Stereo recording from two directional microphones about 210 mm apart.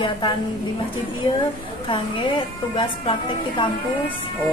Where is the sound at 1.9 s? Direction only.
25° left (ahead or behind).